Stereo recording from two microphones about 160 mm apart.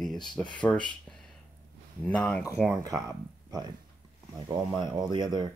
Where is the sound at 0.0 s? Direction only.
Centre (ahead or behind).